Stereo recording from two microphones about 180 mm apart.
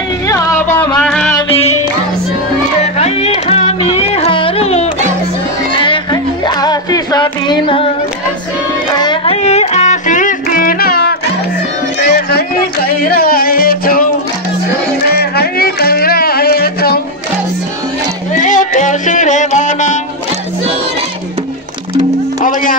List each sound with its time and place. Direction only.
0.3 s a sound: 15° left (ahead or behind)
1.5 s music: 35° left (ahead or behind)
2.8 s music: 35° left (ahead or behind)
6.4 s music: 25° left (ahead or behind)
8.9 s music: 25° left (ahead or behind); by 14.0 s 55° left (ahead or behind)
15.0 s music: 60° left (ahead or behind)
18.3 s music: 45° left (ahead or behind)
22.4 s music: 50° left (ahead or behind)